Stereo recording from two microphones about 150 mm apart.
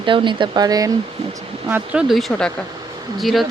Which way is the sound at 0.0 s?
35° right (ahead or behind).